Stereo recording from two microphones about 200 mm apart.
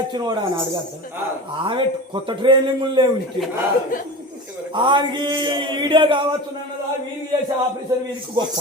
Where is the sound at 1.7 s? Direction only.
25° right (ahead or behind).